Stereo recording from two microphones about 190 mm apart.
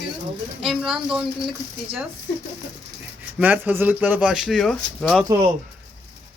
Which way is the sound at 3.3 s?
10° right (ahead or behind).